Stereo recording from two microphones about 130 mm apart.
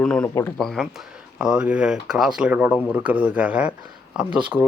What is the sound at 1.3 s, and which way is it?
Speech, 5° right (ahead or behind).